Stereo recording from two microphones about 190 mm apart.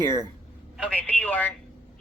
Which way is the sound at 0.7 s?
5° left (ahead or behind).